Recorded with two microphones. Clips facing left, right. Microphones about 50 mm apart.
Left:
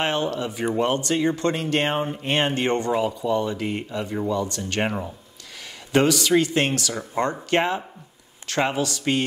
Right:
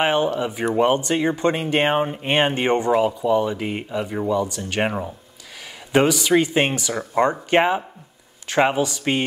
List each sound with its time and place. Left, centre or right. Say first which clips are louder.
0.0 s speech: right 4 dB; centre